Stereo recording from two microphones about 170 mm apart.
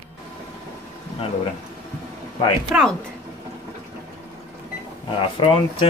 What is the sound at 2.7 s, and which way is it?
Speech, 5° right (ahead or behind).